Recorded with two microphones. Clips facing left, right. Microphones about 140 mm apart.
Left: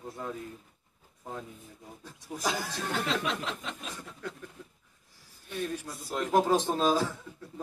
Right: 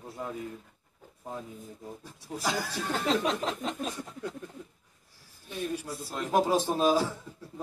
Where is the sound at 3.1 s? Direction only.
40° right (ahead or behind).